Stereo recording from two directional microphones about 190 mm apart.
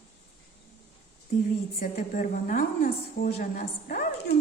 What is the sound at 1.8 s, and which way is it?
A woman's voice, 40° left (ahead or behind).